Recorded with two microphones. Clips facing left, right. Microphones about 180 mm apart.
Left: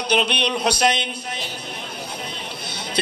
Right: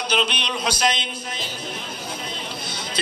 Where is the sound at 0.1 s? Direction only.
60° left (ahead or behind).